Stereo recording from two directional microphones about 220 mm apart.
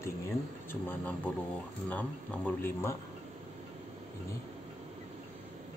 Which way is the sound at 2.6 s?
10° left (ahead or behind).